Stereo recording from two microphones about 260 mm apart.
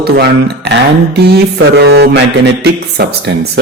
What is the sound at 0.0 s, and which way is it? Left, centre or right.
Speech, right.